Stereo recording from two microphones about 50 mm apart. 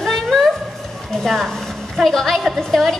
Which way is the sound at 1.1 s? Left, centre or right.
Centre.